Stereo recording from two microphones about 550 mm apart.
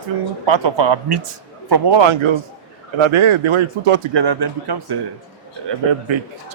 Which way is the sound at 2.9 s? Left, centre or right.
Right.